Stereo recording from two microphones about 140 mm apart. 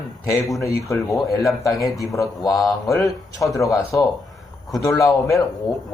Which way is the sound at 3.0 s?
25° left (ahead or behind).